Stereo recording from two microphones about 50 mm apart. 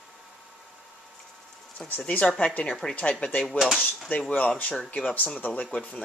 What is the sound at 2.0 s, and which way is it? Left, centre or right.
Speech, left.